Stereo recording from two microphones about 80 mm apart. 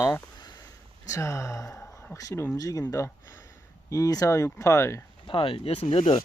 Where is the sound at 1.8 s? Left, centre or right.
Left.